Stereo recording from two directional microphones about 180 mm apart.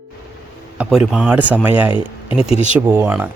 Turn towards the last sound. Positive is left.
turn(degrees=-10)  # may be behind; listen again after turning